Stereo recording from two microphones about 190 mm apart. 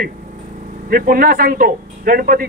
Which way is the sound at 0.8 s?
50° right (ahead or behind).